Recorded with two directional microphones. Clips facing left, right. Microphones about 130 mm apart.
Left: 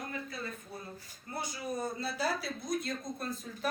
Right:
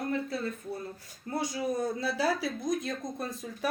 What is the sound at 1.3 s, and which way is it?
Speech, 90° right.